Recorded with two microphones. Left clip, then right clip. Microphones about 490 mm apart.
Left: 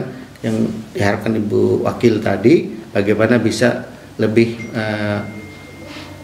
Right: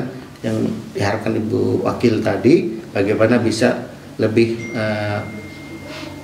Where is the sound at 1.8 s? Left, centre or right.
Left.